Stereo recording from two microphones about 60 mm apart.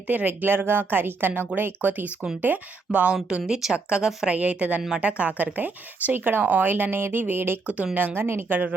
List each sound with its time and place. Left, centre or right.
0.1 s speech: right
3.2 s speech: centre
4.4 s speech: right